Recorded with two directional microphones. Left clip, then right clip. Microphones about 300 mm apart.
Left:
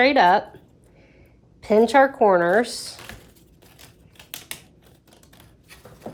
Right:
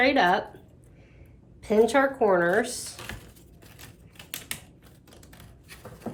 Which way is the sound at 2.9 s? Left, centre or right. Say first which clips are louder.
Even; centre.